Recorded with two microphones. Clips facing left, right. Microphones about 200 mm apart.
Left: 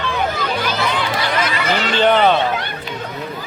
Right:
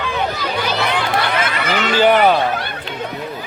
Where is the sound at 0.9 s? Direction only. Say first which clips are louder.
Right 1 dB; 60° right (ahead or behind).